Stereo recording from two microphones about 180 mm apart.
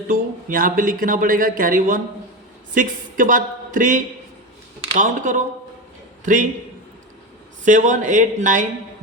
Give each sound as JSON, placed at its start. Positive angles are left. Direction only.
{"t": 0.1, "sound": "speech", "side_deg": -50}
{"t": 7.6, "sound": "speech", "side_deg": -45}